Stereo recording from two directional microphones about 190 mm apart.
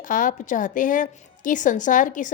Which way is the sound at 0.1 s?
45° left (ahead or behind).